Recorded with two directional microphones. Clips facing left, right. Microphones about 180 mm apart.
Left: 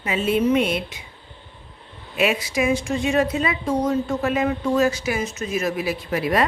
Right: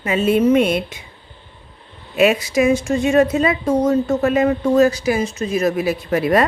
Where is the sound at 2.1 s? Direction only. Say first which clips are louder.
Right 6 dB; 45° right (ahead or behind).